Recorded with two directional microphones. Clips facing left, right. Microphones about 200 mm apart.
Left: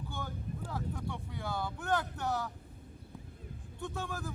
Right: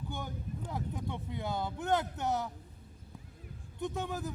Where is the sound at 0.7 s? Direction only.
20° right (ahead or behind).